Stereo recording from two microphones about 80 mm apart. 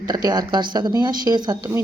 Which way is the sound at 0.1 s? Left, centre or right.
Right.